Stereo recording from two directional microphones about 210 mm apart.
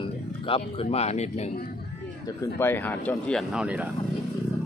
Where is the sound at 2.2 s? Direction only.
15° left (ahead or behind).